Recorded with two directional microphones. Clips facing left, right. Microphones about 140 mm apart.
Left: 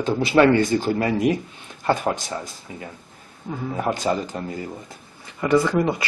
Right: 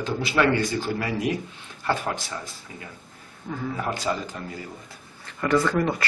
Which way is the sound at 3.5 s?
20° left (ahead or behind).